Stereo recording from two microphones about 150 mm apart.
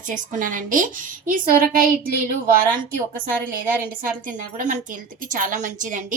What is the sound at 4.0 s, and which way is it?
Speech, 60° right (ahead or behind).